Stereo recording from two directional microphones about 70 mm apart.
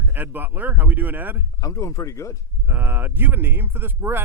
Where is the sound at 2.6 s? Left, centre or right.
Right.